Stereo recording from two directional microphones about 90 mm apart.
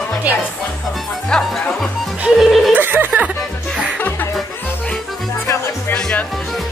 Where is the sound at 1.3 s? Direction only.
10° left (ahead or behind).